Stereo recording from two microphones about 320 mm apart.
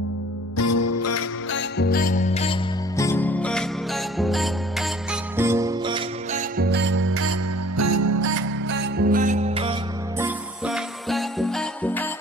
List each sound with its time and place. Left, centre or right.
0.6 s music: left
1.6 s music: left; by 6.4 s centre
6.5 s music: right
8.6 s music: right; by 12.1 s centre